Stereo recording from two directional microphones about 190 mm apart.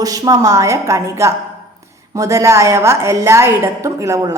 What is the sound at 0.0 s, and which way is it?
A woman's voice, 20° right (ahead or behind).